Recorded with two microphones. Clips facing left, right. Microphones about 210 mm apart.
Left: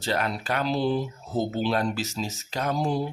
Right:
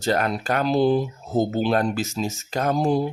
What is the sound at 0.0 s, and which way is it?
Speech, 45° right (ahead or behind).